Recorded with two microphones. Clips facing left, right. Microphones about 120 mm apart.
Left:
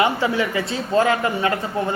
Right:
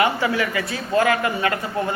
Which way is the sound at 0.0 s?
25° left (ahead or behind).